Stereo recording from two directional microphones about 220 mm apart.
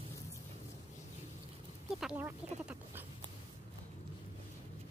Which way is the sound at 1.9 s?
5° right (ahead or behind).